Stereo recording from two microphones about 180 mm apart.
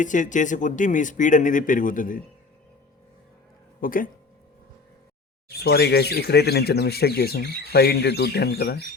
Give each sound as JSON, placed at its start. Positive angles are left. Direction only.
{"t": 0.0, "sound": "speech", "side_deg": 45}
{"t": 3.8, "sound": "speech", "side_deg": 50}
{"t": 5.5, "sound": "speech", "side_deg": 65}